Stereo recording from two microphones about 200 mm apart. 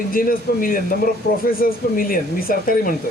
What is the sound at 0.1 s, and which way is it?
A man's voice, 45° left (ahead or behind).